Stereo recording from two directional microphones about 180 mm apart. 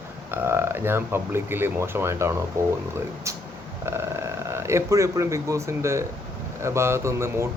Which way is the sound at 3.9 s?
15° right (ahead or behind).